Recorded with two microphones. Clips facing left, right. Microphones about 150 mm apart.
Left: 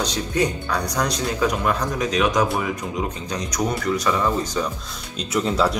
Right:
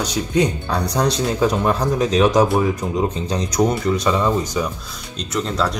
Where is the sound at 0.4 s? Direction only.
25° right (ahead or behind).